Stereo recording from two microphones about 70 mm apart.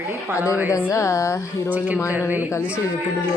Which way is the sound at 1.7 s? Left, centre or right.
Right.